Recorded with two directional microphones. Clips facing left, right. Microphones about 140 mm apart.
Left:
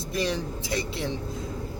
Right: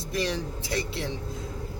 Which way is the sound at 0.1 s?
20° left (ahead or behind).